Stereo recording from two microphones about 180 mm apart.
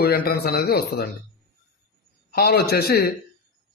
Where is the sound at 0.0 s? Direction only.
60° left (ahead or behind).